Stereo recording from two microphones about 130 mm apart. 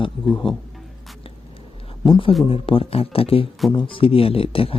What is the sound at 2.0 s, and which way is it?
Speech, 40° left (ahead or behind).